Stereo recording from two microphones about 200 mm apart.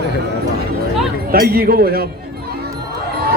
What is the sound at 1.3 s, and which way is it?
Speech, 45° right (ahead or behind).